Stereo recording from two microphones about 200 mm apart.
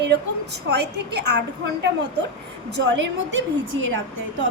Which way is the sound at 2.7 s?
65° right (ahead or behind).